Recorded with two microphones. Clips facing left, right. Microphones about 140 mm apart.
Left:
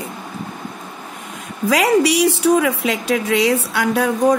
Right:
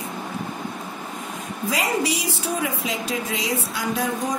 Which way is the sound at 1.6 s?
75° left (ahead or behind).